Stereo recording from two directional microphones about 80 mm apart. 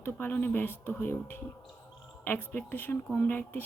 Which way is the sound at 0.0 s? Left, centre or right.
Left.